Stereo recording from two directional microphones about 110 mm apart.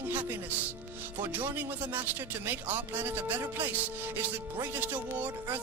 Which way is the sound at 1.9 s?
20° right (ahead or behind).